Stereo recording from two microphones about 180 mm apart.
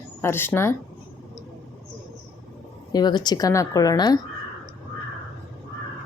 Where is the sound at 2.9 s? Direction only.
25° left (ahead or behind).